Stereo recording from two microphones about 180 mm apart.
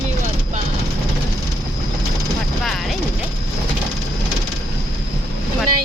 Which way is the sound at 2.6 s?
Centre (ahead or behind).